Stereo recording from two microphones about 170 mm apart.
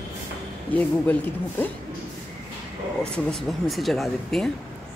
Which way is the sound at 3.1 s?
5° left (ahead or behind).